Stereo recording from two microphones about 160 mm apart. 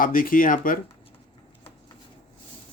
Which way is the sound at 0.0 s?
60° left (ahead or behind).